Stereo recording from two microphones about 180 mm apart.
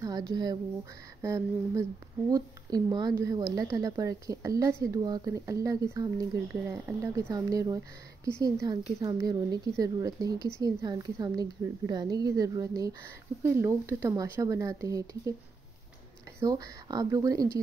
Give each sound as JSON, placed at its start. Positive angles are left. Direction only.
{"t": 0.0, "sound": "speech", "side_deg": -20}
{"t": 16.3, "sound": "speech", "side_deg": -20}